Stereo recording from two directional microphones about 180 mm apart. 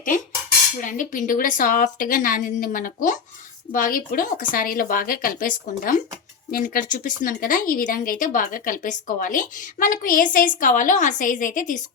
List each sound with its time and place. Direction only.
0.8 s speech: 45° left (ahead or behind)